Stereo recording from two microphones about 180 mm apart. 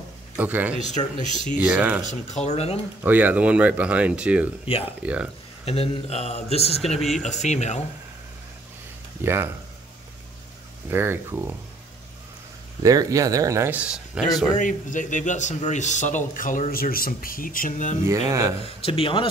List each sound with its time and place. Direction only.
0.4 s speech: 10° right (ahead or behind)
2.0 s speech: 40° left (ahead or behind)
3.0 s speech: 10° right (ahead or behind)
4.6 s speech: 30° left (ahead or behind)
5.0 s speech: 5° right (ahead or behind)
5.7 s speech: 35° left (ahead or behind)
7.0 s speech: centre (ahead or behind)
7.2 s speech: 40° left (ahead or behind)
9.2 s speech: 15° right (ahead or behind)
10.9 s speech: 15° right (ahead or behind)
12.8 s speech: 20° right (ahead or behind)
14.6 s speech: 45° left (ahead or behind)
18.0 s speech: 15° right (ahead or behind)
18.6 s speech: 30° left (ahead or behind)